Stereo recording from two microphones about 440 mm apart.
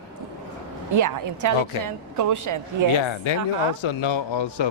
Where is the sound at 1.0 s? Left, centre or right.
Right.